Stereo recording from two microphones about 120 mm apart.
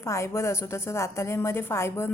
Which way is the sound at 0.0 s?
25° left (ahead or behind).